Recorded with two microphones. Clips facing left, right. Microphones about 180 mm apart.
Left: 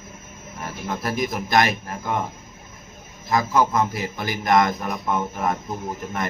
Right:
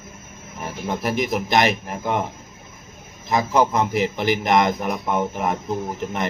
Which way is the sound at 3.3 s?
20° right (ahead or behind).